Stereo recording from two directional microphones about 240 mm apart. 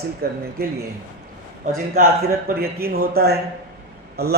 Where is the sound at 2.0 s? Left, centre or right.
Right.